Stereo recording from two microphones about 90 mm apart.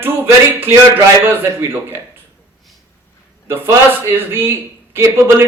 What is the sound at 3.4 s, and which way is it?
Speech, 25° right (ahead or behind).